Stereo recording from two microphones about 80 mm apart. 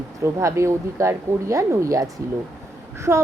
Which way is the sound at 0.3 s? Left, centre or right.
Right.